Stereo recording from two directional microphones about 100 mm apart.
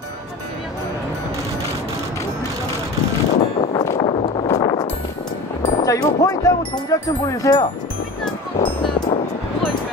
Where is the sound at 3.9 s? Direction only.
80° left.